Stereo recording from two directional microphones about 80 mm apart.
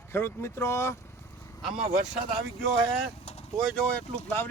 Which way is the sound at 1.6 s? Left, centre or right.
Centre.